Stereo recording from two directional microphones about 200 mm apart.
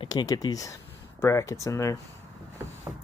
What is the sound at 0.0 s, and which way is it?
Speech, 20° left (ahead or behind).